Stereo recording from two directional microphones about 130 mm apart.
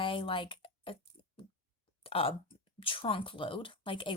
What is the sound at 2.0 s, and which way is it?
A woman's voice, 45° left (ahead or behind).